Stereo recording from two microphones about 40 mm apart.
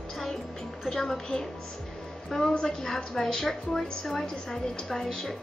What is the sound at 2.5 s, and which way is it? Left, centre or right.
A woman's voice, centre.